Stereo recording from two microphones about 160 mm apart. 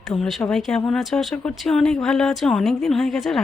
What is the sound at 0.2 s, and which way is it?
Speech, centre (ahead or behind).